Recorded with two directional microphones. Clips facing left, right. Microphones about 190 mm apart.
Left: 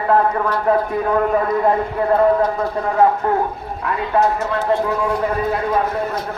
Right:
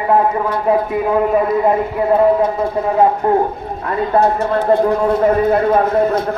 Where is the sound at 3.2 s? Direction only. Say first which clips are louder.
Right 4 dB; 30° right (ahead or behind).